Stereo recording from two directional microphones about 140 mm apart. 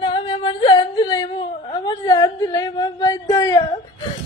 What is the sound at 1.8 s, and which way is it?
Speech, 30° left (ahead or behind).